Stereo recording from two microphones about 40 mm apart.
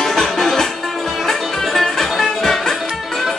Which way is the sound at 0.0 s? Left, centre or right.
Centre.